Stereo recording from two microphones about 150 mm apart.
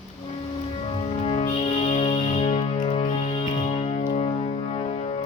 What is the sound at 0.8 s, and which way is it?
Music, 40° left (ahead or behind).